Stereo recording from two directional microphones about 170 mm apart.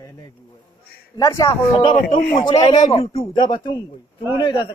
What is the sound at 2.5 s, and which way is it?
Speech, 25° left (ahead or behind).